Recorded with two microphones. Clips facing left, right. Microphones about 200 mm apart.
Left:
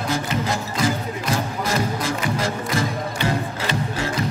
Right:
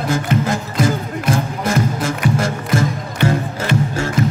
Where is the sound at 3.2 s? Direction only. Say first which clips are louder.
Right 7 dB; 55° right (ahead or behind).